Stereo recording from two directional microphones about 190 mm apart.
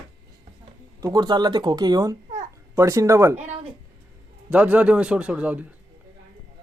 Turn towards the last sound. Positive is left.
turn(degrees=-5)  # may be behind; listen again after turning